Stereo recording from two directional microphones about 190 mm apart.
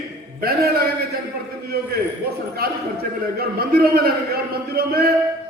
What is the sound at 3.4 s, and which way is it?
A man's voice, 55° right (ahead or behind).